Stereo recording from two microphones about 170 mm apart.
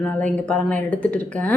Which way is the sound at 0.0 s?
10° left (ahead or behind).